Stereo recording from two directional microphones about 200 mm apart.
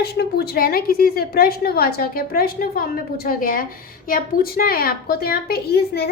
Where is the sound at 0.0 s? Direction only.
50° left (ahead or behind).